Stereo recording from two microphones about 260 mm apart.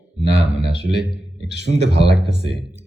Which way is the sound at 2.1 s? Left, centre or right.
Centre.